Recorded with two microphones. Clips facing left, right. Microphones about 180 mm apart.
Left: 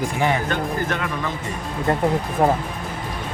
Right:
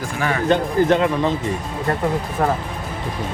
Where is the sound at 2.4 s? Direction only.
25° left (ahead or behind).